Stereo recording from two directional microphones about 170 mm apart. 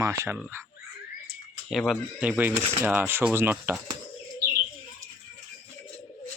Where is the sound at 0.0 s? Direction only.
15° right (ahead or behind).